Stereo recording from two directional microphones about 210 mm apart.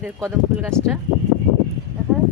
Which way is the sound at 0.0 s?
10° right (ahead or behind).